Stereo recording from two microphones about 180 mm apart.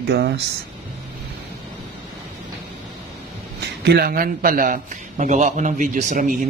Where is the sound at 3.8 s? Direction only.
60° right (ahead or behind).